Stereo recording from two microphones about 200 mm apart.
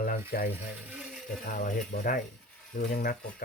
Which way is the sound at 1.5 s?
40° left (ahead or behind).